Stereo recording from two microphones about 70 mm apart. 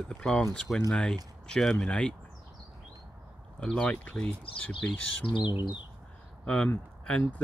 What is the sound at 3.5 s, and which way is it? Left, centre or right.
Speech, centre.